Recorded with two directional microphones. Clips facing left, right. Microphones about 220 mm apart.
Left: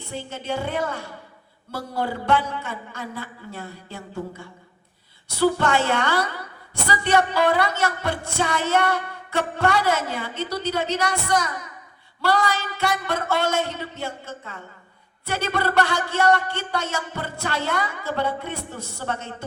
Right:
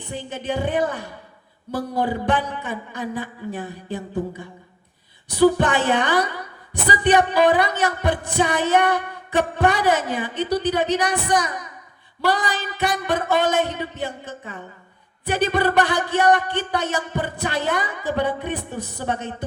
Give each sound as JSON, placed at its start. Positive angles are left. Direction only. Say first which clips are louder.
{"t": 0.1, "sound": "speech", "louder": "right 2 dB", "side_deg": -15}